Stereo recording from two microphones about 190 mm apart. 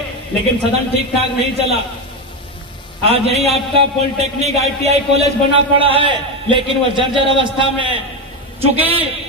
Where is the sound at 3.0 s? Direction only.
35° right (ahead or behind).